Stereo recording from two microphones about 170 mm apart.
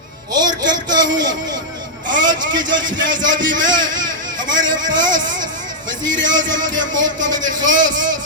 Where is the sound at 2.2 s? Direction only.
25° right (ahead or behind).